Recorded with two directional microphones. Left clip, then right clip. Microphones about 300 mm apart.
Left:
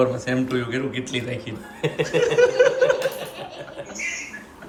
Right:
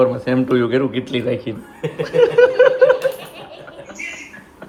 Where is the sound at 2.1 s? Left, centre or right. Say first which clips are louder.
Right 6 dB; centre.